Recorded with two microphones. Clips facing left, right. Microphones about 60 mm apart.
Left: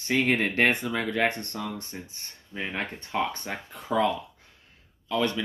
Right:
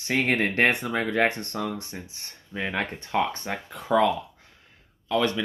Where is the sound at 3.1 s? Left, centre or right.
Right.